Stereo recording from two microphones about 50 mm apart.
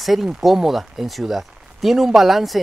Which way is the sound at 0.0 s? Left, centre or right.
Centre.